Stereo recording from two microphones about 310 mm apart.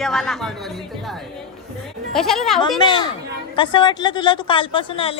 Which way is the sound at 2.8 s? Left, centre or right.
Centre.